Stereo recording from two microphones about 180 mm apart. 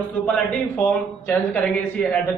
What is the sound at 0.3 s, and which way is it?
A man's voice, 10° left (ahead or behind).